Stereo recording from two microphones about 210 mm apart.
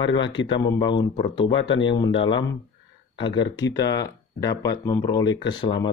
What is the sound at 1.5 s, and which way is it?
Speech, 65° left (ahead or behind).